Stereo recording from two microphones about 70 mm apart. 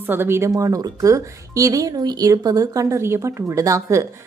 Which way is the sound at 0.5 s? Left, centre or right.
Right.